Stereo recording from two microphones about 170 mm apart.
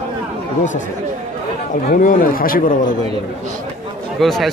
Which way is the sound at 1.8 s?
55° left (ahead or behind).